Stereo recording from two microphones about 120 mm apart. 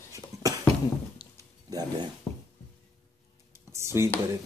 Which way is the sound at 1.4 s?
30° right (ahead or behind).